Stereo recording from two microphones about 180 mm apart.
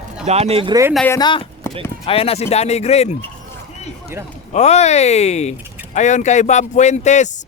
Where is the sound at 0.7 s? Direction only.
15° right (ahead or behind).